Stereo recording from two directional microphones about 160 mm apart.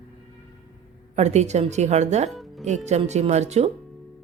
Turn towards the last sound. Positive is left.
turn(degrees=-45)  # may be behind; listen again after turning